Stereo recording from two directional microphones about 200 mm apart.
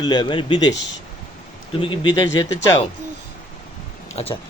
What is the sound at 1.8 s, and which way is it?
Speech, 25° left (ahead or behind).